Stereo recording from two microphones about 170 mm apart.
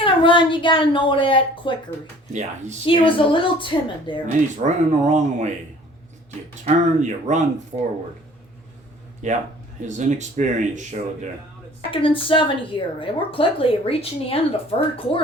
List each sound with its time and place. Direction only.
0.0 s a woman's voice: 30° left (ahead or behind)
2.3 s speech: 45° right (ahead or behind)
2.8 s a woman's voice: 30° left (ahead or behind)
4.6 s speech: 45° right (ahead or behind)
6.7 s speech: 45° right (ahead or behind)
9.2 s speech: 45° right (ahead or behind)
11.9 s a woman's voice: 30° left (ahead or behind)